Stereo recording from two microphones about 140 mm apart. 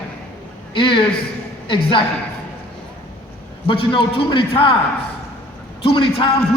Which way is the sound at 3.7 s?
40° left (ahead or behind).